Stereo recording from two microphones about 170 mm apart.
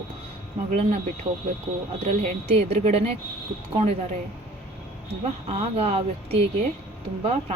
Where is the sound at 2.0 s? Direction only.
40° right (ahead or behind).